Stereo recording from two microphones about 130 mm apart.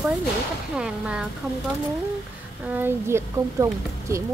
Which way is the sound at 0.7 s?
5° right (ahead or behind).